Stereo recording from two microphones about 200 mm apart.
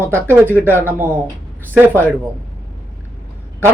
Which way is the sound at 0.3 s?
10° right (ahead or behind).